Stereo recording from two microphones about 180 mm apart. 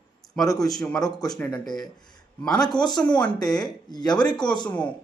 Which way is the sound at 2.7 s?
25° left (ahead or behind).